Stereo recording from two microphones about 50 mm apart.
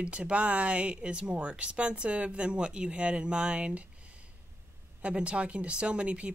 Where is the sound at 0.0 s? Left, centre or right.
Right.